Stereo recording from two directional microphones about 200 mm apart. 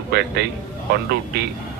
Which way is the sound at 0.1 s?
55° right (ahead or behind).